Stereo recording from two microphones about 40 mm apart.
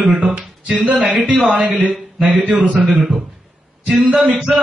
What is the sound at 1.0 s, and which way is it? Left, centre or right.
Speech, centre.